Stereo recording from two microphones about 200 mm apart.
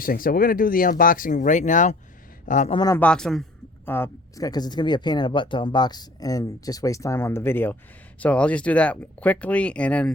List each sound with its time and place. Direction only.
0.0 s a man's voice: 45° left (ahead or behind)
2.7 s speech: 20° left (ahead or behind)
3.0 s speech: 5° left (ahead or behind)